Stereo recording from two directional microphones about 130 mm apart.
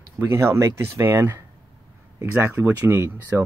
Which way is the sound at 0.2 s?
20° right (ahead or behind).